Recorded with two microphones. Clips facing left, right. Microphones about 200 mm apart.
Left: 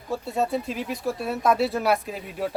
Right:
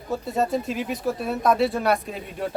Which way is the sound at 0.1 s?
Centre (ahead or behind).